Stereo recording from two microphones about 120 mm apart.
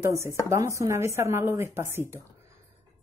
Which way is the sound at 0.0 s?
25° right (ahead or behind).